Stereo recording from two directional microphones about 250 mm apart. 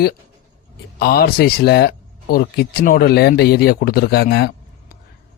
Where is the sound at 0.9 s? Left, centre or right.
Left.